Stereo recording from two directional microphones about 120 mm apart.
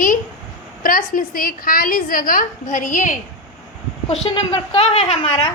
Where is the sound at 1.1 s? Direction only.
90° left.